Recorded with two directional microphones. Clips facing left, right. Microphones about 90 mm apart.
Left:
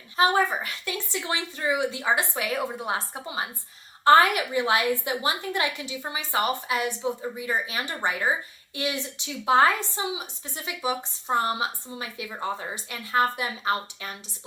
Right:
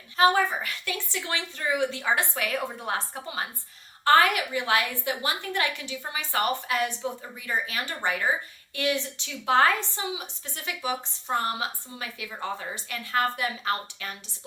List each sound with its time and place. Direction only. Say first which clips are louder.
0.2 s a woman's voice: even; 25° left (ahead or behind)